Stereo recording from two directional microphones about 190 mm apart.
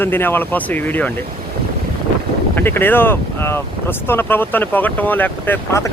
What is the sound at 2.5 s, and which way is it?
Speech, 10° left (ahead or behind).